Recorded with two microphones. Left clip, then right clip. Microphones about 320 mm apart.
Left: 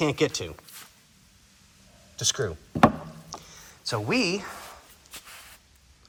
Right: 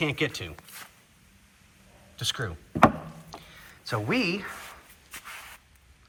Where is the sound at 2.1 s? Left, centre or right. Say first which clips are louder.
Left 4 dB; centre.